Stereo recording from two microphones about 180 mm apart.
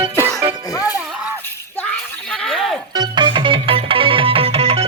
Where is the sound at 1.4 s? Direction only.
10° left (ahead or behind).